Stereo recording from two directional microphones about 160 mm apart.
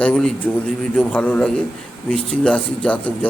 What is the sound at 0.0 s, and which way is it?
Speech, 5° left (ahead or behind).